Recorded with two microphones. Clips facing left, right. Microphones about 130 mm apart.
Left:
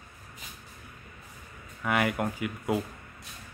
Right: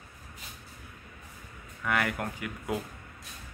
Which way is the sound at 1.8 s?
15° left (ahead or behind).